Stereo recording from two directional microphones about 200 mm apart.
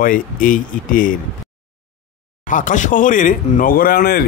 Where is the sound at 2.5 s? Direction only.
40° left (ahead or behind).